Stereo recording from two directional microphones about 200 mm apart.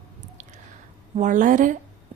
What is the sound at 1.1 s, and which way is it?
Speech, 40° right (ahead or behind).